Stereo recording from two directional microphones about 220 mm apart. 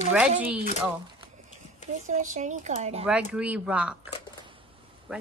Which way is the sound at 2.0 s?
35° right (ahead or behind).